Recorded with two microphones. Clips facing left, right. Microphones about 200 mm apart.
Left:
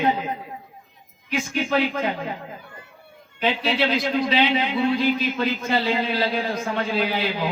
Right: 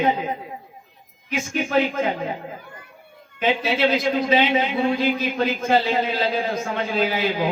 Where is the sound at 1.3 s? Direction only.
45° right (ahead or behind).